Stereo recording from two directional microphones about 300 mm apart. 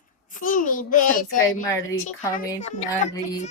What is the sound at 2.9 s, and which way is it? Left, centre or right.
Speech, centre.